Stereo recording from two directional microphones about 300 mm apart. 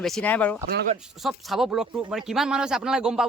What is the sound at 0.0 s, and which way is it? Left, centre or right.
Speech, centre.